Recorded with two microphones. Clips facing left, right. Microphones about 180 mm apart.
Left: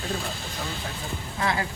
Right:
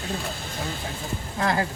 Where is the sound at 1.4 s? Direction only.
45° right (ahead or behind).